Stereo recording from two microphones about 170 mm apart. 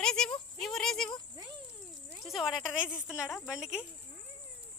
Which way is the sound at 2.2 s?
Centre (ahead or behind).